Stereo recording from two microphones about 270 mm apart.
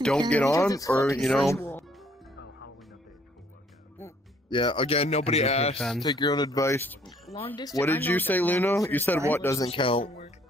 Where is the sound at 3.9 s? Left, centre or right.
Centre.